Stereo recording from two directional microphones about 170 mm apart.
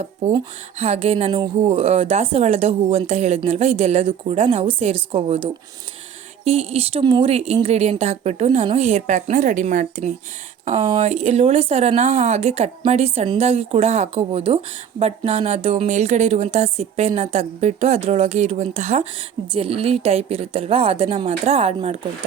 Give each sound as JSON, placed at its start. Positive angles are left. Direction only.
{"t": 0.8, "sound": "speech", "side_deg": -40}
{"t": 6.4, "sound": "speech", "side_deg": -35}